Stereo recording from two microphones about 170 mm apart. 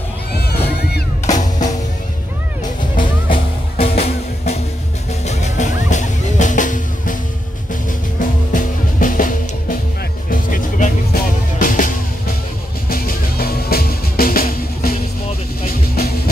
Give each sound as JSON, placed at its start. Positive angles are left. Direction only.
{"t": 1.2, "sound": "music", "side_deg": 45}
{"t": 3.0, "sound": "music", "side_deg": 30}
{"t": 8.2, "sound": "music", "side_deg": 50}